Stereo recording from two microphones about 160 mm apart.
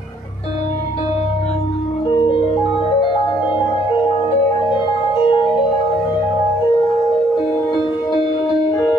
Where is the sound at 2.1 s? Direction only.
30° left (ahead or behind).